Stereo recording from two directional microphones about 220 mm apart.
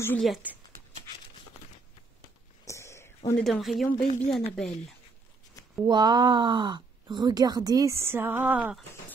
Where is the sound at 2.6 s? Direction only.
15° left (ahead or behind).